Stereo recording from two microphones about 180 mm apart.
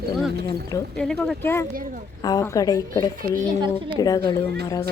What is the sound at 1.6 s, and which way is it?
Speech, 50° right (ahead or behind).